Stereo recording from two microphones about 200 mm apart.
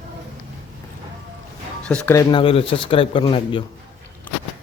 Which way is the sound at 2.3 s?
25° left (ahead or behind).